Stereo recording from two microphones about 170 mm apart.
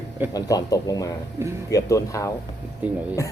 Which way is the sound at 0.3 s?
20° left (ahead or behind).